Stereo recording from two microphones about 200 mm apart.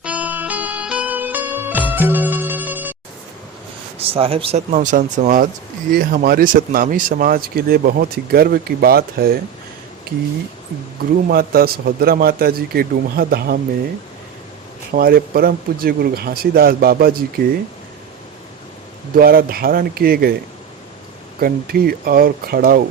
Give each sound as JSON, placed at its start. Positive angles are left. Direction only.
{"t": 0.0, "sound": "music", "side_deg": -5}
{"t": 3.9, "sound": "speech", "side_deg": -30}
{"t": 11.3, "sound": "speech", "side_deg": -50}
{"t": 14.9, "sound": "speech", "side_deg": -45}
{"t": 19.1, "sound": "speech", "side_deg": -45}
{"t": 21.4, "sound": "speech", "side_deg": -50}